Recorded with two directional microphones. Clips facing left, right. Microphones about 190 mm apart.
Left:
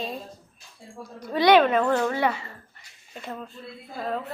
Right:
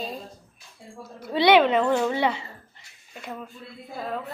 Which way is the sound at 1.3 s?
15° right (ahead or behind).